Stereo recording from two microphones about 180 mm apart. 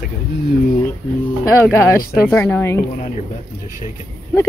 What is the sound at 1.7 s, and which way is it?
Speech, 15° left (ahead or behind).